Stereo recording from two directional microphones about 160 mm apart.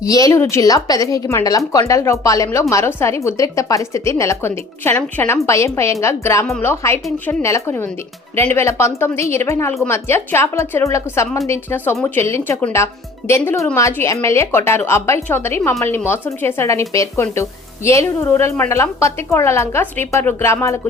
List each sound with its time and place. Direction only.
0.0 s speech: 20° left (ahead or behind)